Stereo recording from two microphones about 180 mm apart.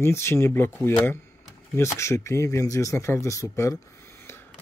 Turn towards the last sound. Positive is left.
turn(degrees=15)  # may be behind; listen again after turning